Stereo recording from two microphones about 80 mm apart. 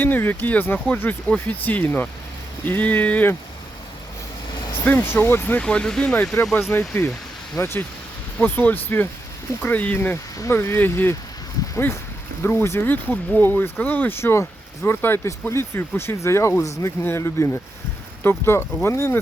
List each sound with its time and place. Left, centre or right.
0.0 s speech: left
4.7 s speech: left
5.5 s speech: centre
6.5 s speech: left
12.4 s speech: left